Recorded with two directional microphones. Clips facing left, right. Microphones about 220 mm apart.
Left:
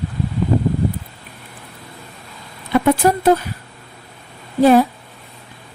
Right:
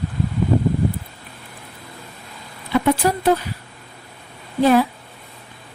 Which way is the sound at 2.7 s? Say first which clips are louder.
Left 3 dB; 50° left (ahead or behind).